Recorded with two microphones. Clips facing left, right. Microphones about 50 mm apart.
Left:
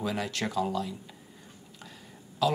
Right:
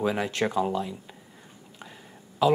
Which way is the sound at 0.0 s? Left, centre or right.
Right.